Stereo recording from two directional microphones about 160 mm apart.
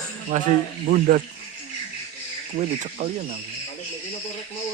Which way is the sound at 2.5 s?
50° right (ahead or behind).